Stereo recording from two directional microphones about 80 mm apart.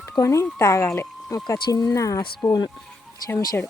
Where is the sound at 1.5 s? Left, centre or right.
Left.